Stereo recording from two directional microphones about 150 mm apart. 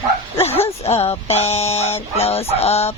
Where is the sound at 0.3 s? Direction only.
40° left (ahead or behind).